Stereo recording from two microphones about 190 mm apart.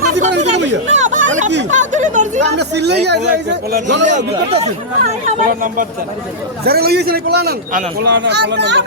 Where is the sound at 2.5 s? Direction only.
65° right (ahead or behind).